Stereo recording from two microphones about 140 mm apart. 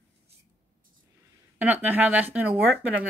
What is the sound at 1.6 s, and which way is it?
Speech, 15° right (ahead or behind).